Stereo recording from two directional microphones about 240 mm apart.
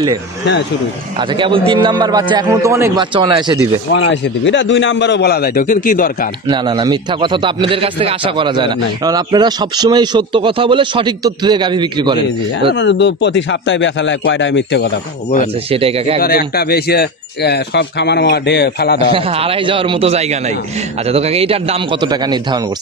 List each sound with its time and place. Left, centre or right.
1.3 s a man's voice: centre
3.9 s speech: left
6.4 s a man's voice: centre
12.7 s speech: left
15.7 s a man's voice: right
16.2 s speech: left
19.1 s a man's voice: right